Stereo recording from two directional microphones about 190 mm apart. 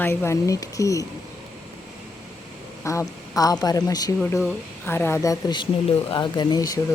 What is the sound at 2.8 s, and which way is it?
Speech, 15° left (ahead or behind).